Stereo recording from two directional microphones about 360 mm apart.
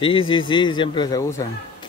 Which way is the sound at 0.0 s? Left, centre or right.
Centre.